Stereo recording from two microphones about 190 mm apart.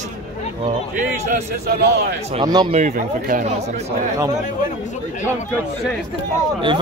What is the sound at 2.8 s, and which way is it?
Speech, 40° right (ahead or behind).